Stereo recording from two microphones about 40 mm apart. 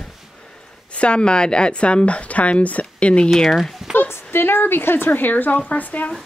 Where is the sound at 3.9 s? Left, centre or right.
Left.